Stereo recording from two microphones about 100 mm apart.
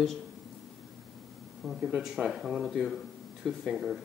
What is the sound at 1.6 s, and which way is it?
Speech, centre (ahead or behind).